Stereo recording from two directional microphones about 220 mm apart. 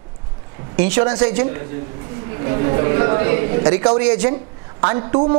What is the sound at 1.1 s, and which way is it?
A man's voice, 20° right (ahead or behind).